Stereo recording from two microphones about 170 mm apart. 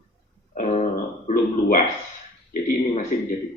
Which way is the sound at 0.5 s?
45° left (ahead or behind).